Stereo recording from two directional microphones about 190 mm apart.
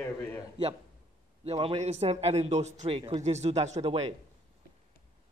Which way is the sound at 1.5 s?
30° right (ahead or behind).